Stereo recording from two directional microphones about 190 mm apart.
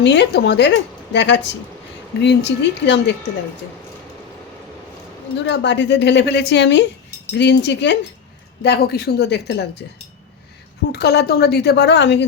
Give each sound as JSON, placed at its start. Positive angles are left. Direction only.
{"t": 0.0, "sound": "speech", "side_deg": 65}
{"t": 5.5, "sound": "speech", "side_deg": 65}
{"t": 10.9, "sound": "speech", "side_deg": 60}